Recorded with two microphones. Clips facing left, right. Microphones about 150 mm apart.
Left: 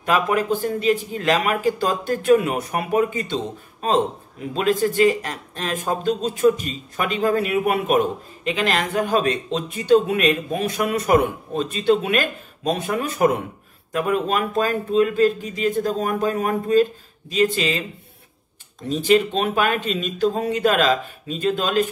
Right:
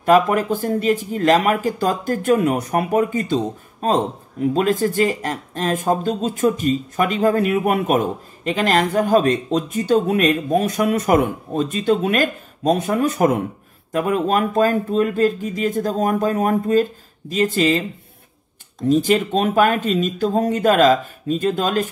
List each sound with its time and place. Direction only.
0.0 s speech: 45° right (ahead or behind)
4.6 s speech: 45° right (ahead or behind)
18.9 s speech: 45° right (ahead or behind)